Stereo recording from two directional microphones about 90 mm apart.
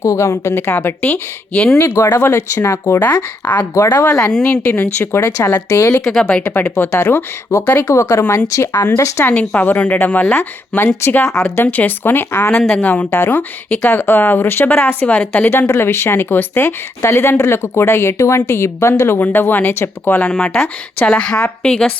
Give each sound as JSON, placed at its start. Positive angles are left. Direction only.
{"t": 0.0, "sound": "speech", "side_deg": 35}
{"t": 1.0, "sound": "a woman's voice", "side_deg": 10}
{"t": 2.0, "sound": "speech", "side_deg": 30}
{"t": 3.4, "sound": "a woman's voice", "side_deg": 20}
{"t": 4.2, "sound": "a woman's voice", "side_deg": 10}
{"t": 4.7, "sound": "speech", "side_deg": 20}
{"t": 5.6, "sound": "speech", "side_deg": 35}
{"t": 6.1, "sound": "a woman's voice", "side_deg": 10}
{"t": 7.9, "sound": "speech", "side_deg": 35}
{"t": 9.2, "sound": "a woman's voice", "side_deg": 15}
{"t": 15.4, "sound": "speech", "side_deg": 25}
{"t": 20.3, "sound": "a woman's voice", "side_deg": 10}